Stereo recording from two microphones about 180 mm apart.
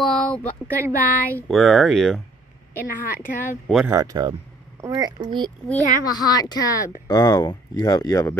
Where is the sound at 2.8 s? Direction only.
50° left (ahead or behind).